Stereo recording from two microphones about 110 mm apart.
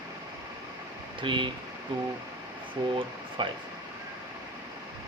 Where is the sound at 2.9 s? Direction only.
45° right (ahead or behind).